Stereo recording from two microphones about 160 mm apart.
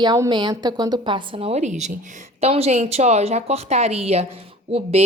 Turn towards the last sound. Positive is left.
turn(degrees=-40)  # may be behind; listen again after turning